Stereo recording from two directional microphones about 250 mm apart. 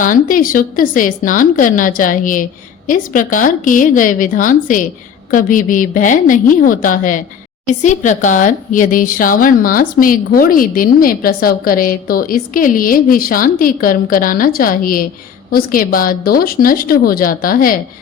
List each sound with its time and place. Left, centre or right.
0.0 s speech: left